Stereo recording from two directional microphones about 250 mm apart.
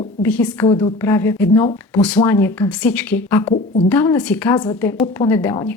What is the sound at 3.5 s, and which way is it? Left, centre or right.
Speech, left.